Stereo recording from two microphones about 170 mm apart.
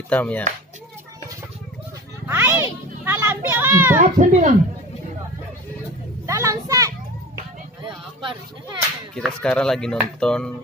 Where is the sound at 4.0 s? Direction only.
45° right (ahead or behind).